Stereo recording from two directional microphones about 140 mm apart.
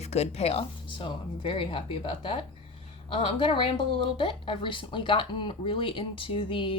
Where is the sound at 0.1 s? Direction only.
50° left (ahead or behind).